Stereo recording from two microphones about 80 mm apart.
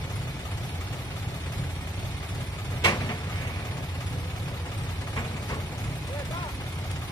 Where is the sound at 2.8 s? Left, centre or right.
Left.